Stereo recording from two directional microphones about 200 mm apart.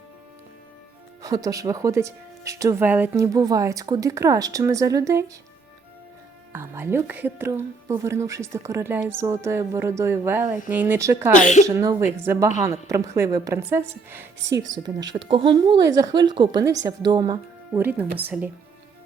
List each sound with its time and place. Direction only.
1.2 s speech: 15° right (ahead or behind)
6.5 s speech: 10° right (ahead or behind)
18.2 s speech: 10° right (ahead or behind)